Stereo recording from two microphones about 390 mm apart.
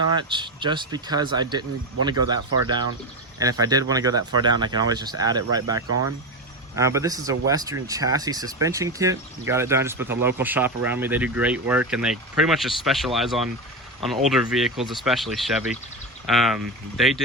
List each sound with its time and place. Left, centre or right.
0.2 s speech: centre
5.9 s speech: right
6.7 s speech: centre